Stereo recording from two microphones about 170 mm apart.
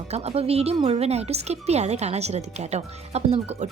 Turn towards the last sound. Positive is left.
turn(degrees=-40)  # may be behind; listen again after turning